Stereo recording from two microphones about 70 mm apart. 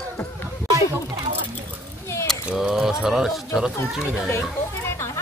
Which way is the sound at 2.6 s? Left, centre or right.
Centre.